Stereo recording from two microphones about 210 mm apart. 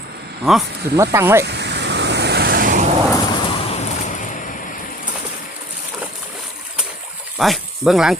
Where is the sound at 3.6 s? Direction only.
30° left (ahead or behind).